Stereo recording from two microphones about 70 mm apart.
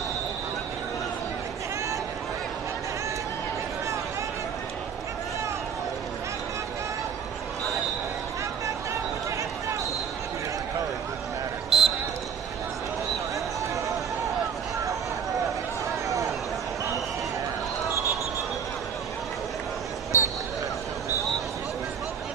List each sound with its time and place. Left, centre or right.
11.7 s basketball bounce: centre
20.1 s basketball bounce: left